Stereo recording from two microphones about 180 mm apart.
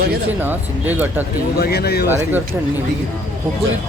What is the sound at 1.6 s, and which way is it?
Speech, 60° left (ahead or behind).